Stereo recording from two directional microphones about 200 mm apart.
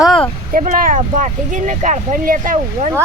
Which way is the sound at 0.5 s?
40° right (ahead or behind).